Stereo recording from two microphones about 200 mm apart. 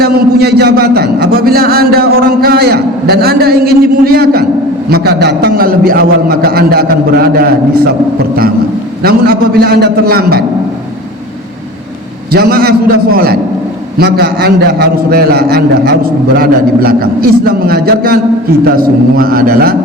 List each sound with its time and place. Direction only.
0.0 s a man's voice: 50° right (ahead or behind)
9.0 s a man's voice: 50° right (ahead or behind)
12.3 s a man's voice: 50° right (ahead or behind)